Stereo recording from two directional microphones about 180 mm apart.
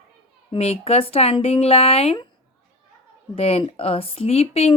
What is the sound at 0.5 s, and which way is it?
Speech, 35° left (ahead or behind).